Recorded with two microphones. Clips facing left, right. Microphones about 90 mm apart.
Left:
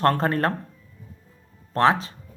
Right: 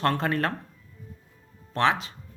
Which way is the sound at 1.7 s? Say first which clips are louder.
Left 4 dB; 35° left (ahead or behind).